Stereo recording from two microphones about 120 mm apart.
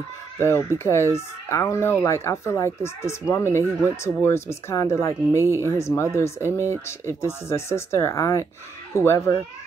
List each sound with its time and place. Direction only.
0.4 s speech: 20° left (ahead or behind)